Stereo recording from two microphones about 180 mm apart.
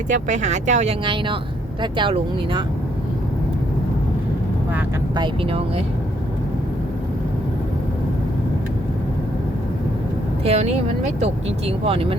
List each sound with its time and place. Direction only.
0.1 s speech: 40° right (ahead or behind)
1.0 s speech: 30° right (ahead or behind)
5.1 s speech: 25° right (ahead or behind)
10.4 s speech: 35° right (ahead or behind)